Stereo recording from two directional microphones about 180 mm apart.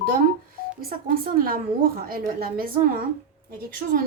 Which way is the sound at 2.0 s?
55° right (ahead or behind).